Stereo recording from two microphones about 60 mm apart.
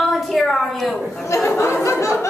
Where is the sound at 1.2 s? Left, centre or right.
Left.